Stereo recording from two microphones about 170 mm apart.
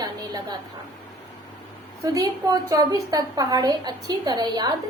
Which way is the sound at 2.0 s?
20° right (ahead or behind).